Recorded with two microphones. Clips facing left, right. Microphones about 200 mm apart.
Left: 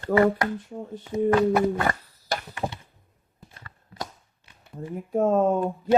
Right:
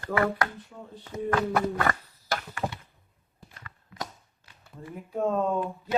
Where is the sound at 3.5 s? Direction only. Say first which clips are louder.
Even; 30° left (ahead or behind).